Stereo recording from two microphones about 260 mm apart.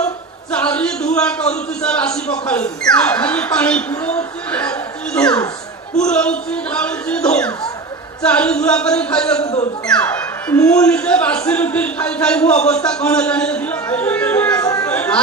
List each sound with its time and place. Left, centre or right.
0.5 s a man's voice: centre
9.4 s a man's voice: left
9.8 s speech: centre